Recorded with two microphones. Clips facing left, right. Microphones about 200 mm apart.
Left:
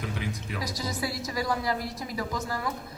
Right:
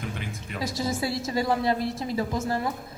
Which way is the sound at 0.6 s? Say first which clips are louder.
Right 6 dB; 25° right (ahead or behind).